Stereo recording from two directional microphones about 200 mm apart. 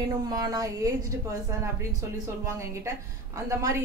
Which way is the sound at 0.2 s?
20° right (ahead or behind).